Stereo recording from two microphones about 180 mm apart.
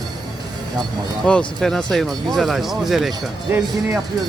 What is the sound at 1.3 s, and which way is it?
Speech, 5° left (ahead or behind).